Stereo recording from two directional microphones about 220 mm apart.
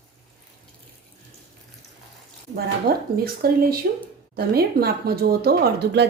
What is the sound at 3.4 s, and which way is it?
A woman's voice, 45° right (ahead or behind).